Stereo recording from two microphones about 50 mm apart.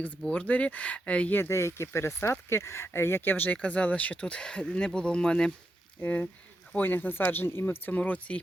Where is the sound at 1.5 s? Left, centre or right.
Left.